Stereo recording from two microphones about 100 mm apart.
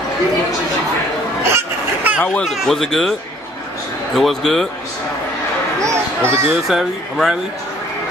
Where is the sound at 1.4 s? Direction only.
25° right (ahead or behind).